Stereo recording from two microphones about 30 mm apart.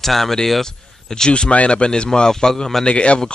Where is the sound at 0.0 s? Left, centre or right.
Centre.